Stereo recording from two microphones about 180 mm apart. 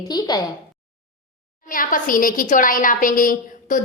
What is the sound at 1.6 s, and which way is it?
A woman's voice, 50° left (ahead or behind).